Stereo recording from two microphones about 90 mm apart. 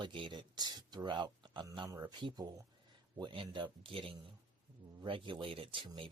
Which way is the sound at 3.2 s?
65° right (ahead or behind).